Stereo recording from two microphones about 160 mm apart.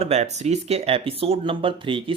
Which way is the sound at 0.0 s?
45° right (ahead or behind).